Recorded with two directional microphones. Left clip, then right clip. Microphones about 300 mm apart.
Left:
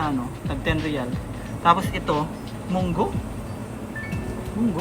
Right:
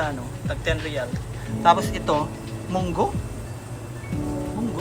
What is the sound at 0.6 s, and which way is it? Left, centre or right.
Speech, centre.